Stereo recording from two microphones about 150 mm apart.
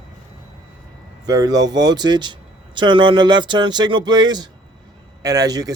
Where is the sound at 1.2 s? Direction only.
25° right (ahead or behind).